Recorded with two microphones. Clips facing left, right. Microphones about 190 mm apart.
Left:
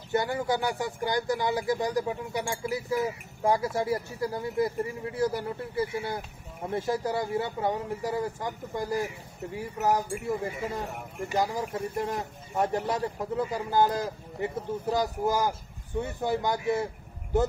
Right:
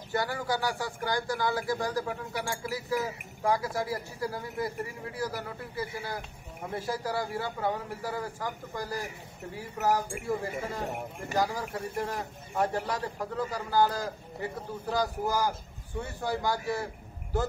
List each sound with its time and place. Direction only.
0.1 s speech: 20° left (ahead or behind)
11.3 s speech: 20° left (ahead or behind)